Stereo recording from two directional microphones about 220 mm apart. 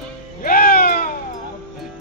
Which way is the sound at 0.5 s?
40° left (ahead or behind).